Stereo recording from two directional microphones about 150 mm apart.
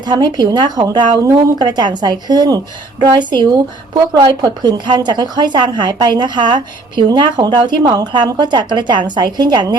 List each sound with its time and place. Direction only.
0.0 s a woman's voice: 30° right (ahead or behind)